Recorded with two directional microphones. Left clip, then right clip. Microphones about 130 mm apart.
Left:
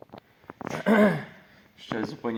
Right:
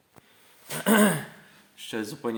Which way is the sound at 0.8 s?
10° right (ahead or behind).